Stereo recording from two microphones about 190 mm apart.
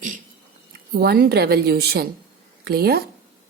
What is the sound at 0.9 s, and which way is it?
A woman's voice, 55° right (ahead or behind).